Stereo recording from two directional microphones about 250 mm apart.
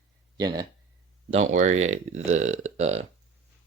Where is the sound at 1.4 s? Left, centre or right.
Right.